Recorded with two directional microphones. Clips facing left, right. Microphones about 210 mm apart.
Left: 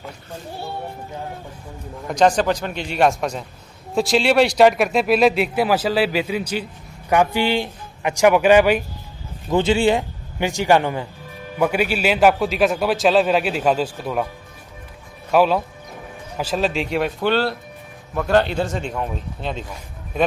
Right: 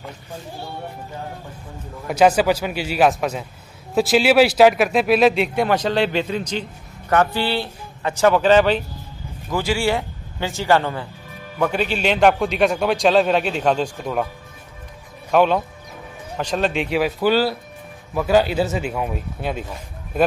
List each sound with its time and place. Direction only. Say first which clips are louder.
2.0 s speech: right 1 dB; 5° right (ahead or behind); by 8.8 s 10° left (ahead or behind)
9.5 s speech: left 4 dB; 20° left (ahead or behind); by 14.2 s 5° left (ahead or behind)
15.3 s speech: even; 5° left (ahead or behind)